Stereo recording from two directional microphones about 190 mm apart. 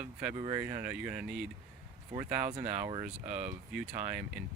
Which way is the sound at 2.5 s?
35° right (ahead or behind).